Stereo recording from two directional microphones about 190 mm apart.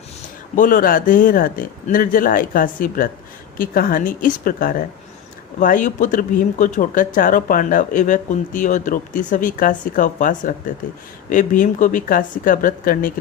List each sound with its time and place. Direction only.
0.5 s speech: 45° left (ahead or behind)